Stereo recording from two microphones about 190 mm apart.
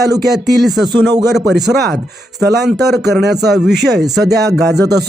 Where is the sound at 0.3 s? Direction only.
Centre (ahead or behind).